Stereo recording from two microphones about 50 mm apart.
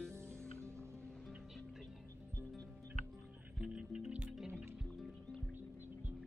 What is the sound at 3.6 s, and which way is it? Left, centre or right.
Music, right.